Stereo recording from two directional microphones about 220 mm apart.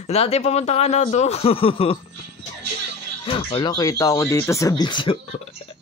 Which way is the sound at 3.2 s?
25° left (ahead or behind).